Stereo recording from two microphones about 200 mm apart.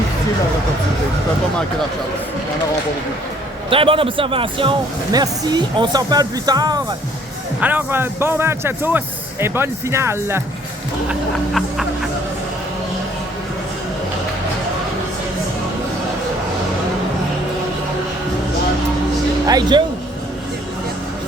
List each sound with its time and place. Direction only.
3.7 s speech: 25° right (ahead or behind)
7.6 s speech: 10° right (ahead or behind)
11.1 s music: centre (ahead or behind)
19.5 s speech: 20° right (ahead or behind)